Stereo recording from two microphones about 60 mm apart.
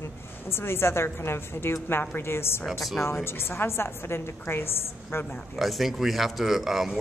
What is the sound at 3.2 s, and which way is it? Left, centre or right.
A woman's voice, left.